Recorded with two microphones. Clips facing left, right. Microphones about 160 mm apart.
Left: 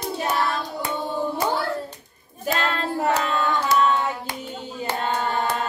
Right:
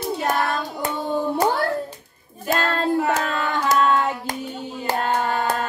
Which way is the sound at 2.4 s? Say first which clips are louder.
Right 3 dB; 45° right (ahead or behind).